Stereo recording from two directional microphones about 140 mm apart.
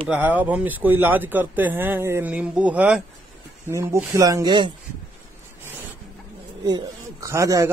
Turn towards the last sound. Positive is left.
turn(degrees=-25)  # may be behind; listen again after turning